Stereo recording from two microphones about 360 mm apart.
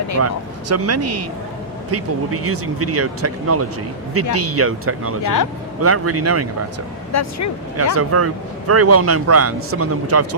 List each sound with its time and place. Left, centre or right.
0.2 s a man's voice: right
5.2 s speech: left
5.8 s a man's voice: right
7.1 s speech: left
7.9 s a man's voice: right